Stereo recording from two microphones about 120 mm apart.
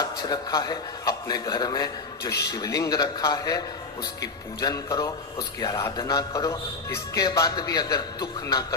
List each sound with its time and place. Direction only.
0.0 s a man's voice: 35° left (ahead or behind)